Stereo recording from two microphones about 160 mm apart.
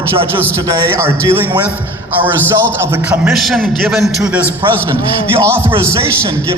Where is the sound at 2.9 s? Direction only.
10° right (ahead or behind).